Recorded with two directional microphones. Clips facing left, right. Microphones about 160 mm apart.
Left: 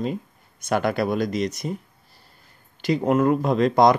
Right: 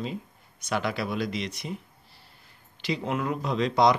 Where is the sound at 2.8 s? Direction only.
45° left (ahead or behind).